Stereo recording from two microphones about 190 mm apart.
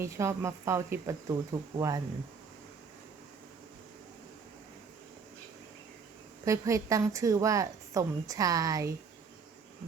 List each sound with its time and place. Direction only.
0.0 s a woman's voice: 15° right (ahead or behind)
6.4 s a woman's voice: 15° right (ahead or behind)